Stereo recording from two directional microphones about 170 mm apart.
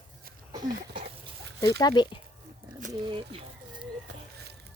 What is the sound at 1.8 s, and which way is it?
Speech, 25° left (ahead or behind).